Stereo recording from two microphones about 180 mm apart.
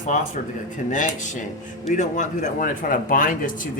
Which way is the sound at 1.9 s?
45° left (ahead or behind).